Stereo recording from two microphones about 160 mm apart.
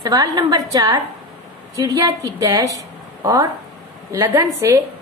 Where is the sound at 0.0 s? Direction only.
25° right (ahead or behind).